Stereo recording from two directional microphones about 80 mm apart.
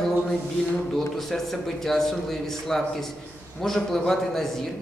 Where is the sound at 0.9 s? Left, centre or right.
Centre.